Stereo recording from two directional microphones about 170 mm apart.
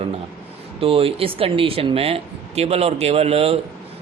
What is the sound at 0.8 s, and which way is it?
Speech, 35° right (ahead or behind).